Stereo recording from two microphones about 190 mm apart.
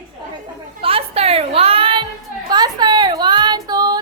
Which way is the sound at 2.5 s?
20° right (ahead or behind).